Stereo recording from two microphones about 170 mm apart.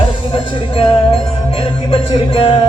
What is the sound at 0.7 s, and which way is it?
Music, 30° left (ahead or behind).